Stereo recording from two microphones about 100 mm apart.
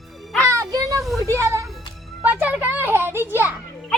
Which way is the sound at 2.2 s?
15° right (ahead or behind).